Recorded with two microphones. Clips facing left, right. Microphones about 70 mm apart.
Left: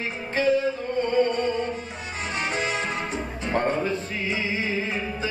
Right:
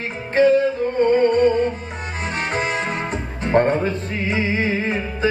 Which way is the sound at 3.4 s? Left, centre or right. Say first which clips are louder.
Right 7 dB; right.